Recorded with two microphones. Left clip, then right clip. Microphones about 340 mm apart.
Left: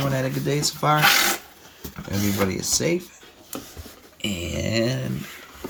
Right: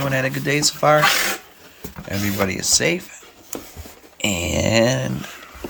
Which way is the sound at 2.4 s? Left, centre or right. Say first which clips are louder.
Right 5 dB; centre.